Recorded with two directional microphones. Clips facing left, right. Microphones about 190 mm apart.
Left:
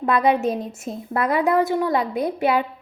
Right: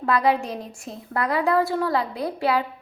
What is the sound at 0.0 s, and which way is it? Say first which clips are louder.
A woman's voice: left 3 dB; 20° left (ahead or behind).